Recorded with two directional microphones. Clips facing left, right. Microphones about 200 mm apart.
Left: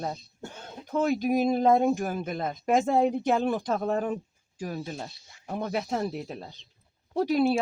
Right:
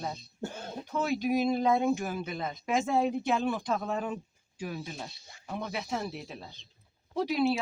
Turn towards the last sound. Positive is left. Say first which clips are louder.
# left 4 dB
turn(degrees=45)  # may be behind; listen again after turning